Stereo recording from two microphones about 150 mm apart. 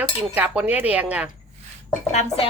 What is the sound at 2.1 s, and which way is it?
Speech, 45° left (ahead or behind).